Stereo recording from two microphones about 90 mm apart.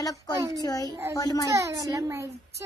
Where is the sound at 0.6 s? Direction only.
45° left (ahead or behind).